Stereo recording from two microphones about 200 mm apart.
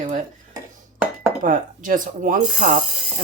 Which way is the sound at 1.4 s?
40° right (ahead or behind).